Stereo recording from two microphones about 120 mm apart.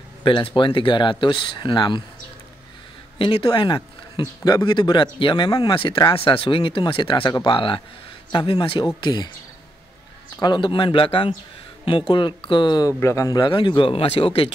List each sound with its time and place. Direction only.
0.2 s a man's voice: 40° left (ahead or behind)
3.2 s a man's voice: 40° left (ahead or behind)
10.4 s a man's voice: 40° left (ahead or behind); by 13.4 s 25° left (ahead or behind)
13.4 s a man's voice: 40° left (ahead or behind)